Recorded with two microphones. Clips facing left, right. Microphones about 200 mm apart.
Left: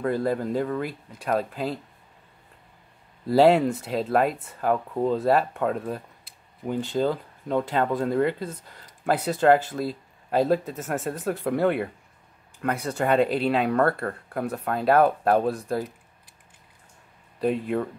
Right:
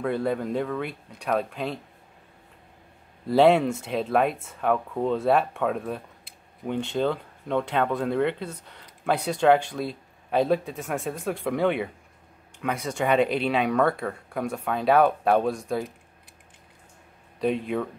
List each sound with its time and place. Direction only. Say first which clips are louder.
0.0 s speech: left 1 dB; centre (ahead or behind)
3.3 s speech: left 1 dB; 5° left (ahead or behind)
17.4 s speech: left 1 dB; 5° left (ahead or behind)